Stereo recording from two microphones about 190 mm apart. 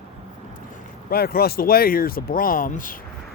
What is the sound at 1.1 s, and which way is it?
Speech, 55° left (ahead or behind).